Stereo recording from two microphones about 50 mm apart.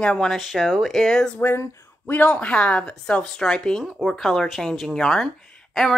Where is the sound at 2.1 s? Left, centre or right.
Left.